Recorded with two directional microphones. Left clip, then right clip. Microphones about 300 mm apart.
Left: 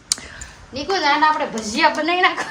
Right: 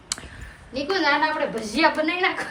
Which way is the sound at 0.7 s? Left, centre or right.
Left.